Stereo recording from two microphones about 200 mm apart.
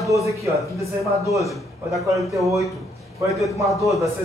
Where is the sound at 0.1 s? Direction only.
15° right (ahead or behind).